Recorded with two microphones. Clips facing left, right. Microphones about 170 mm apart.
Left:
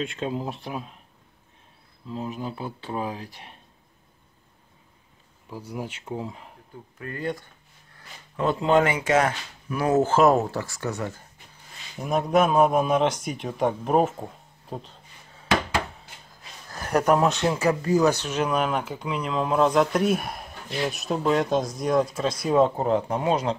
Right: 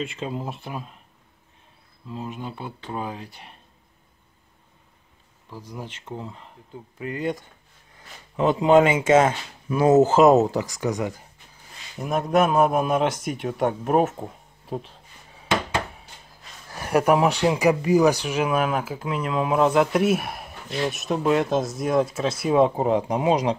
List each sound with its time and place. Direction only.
0.0 s speech: centre (ahead or behind)
2.0 s speech: centre (ahead or behind)
5.5 s speech: 10° left (ahead or behind)
7.0 s speech: 20° right (ahead or behind)
12.0 s speech: centre (ahead or behind)
16.6 s speech: 10° right (ahead or behind)